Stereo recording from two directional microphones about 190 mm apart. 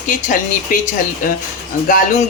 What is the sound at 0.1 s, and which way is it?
Speech, 45° left (ahead or behind).